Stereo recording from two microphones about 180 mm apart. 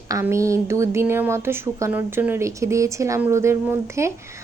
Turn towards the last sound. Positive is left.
turn(degrees=-15)  # may be behind; listen again after turning